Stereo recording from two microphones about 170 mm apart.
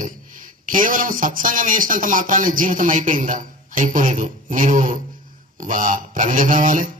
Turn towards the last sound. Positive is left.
turn(degrees=-50)  # may be behind; listen again after turning